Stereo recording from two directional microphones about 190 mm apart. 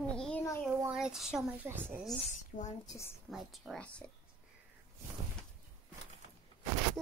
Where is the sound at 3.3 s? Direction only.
Centre (ahead or behind).